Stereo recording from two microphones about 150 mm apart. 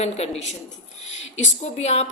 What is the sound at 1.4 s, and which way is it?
Speech, 50° left (ahead or behind).